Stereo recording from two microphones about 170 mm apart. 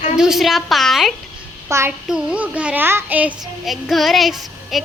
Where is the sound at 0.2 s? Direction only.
Centre (ahead or behind).